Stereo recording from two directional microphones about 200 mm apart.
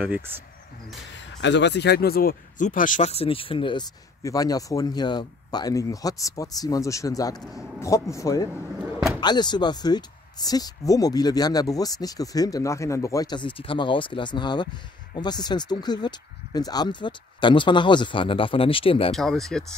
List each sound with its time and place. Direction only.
1.1 s speech: 60° left (ahead or behind); by 19.1 s 30° left (ahead or behind)
19.1 s speech: centre (ahead or behind)